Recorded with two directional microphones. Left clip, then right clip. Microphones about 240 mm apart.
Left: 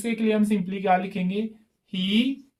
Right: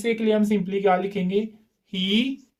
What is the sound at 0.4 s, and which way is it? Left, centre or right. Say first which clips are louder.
Speech: right 3 dB; right.